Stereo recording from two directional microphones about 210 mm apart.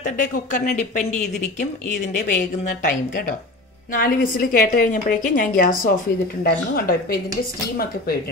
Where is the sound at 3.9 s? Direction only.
45° left (ahead or behind).